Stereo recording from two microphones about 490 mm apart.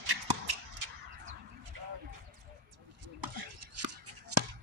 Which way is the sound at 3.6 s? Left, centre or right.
Right.